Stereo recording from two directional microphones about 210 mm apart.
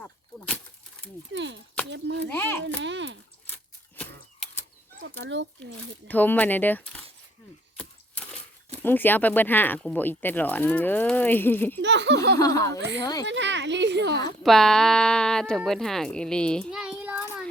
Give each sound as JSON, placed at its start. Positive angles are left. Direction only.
{"t": 0.0, "sound": "a sound", "side_deg": 5}
{"t": 1.3, "sound": "speech", "side_deg": -60}
{"t": 3.5, "sound": "a sound", "side_deg": 5}
{"t": 5.0, "sound": "speech", "side_deg": -60}
{"t": 6.1, "sound": "speech", "side_deg": 10}
{"t": 7.8, "sound": "a sound", "side_deg": 5}
{"t": 8.8, "sound": "speech", "side_deg": 10}
{"t": 11.8, "sound": "speech", "side_deg": -55}
{"t": 12.4, "sound": "speech", "side_deg": 15}
{"t": 13.2, "sound": "a child's voice", "side_deg": -60}
{"t": 14.4, "sound": "speech", "side_deg": 0}